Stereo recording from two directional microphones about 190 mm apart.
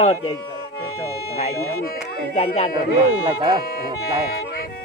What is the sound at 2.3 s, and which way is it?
Speech, 30° left (ahead or behind).